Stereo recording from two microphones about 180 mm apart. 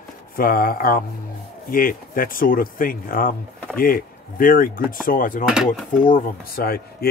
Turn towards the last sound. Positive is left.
turn(degrees=60)  # may be behind; listen again after turning